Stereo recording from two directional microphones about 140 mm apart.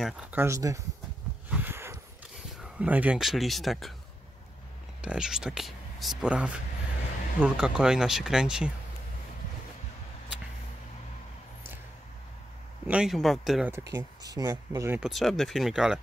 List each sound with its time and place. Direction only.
0.0 s speech: 10° right (ahead or behind)
1.5 s a sound: 15° right (ahead or behind)
2.6 s speech: 10° right (ahead or behind)
5.0 s speech: 5° right (ahead or behind)
12.8 s speech: 5° right (ahead or behind)
13.7 s speech: 15° right (ahead or behind)
15.0 s speech: centre (ahead or behind)